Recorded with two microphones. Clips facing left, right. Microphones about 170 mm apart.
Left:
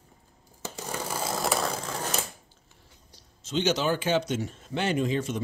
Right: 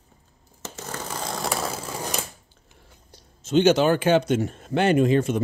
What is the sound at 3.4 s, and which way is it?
Speech, 55° right (ahead or behind).